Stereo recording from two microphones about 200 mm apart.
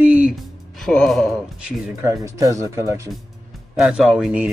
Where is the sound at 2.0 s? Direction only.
15° right (ahead or behind).